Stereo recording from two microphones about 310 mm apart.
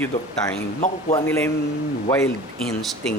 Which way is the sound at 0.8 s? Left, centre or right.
Centre.